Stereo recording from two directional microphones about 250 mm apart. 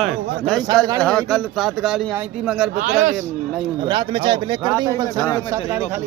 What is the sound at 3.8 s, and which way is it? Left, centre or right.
Speech, centre.